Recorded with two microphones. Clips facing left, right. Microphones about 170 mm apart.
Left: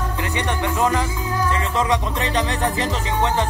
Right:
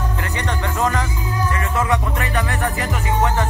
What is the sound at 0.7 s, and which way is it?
Music, 15° left (ahead or behind).